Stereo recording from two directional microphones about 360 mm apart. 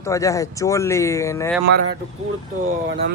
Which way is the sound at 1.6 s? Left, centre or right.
Right.